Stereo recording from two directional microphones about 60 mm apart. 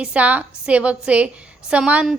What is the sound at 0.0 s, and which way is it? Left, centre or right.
A woman's voice, right.